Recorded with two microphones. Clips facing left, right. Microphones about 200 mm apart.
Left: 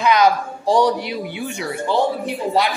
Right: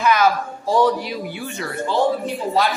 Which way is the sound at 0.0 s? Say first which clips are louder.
Left 2 dB; 15° left (ahead or behind).